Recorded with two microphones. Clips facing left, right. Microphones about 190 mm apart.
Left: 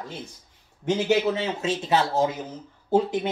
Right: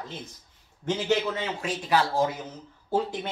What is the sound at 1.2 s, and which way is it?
Speech, 25° left (ahead or behind).